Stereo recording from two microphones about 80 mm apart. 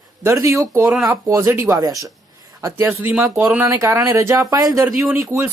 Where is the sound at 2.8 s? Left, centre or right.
Right.